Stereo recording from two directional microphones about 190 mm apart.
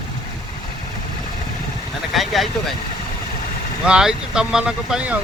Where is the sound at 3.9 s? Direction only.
5° right (ahead or behind).